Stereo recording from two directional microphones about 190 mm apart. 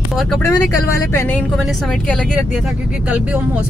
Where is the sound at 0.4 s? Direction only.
20° left (ahead or behind).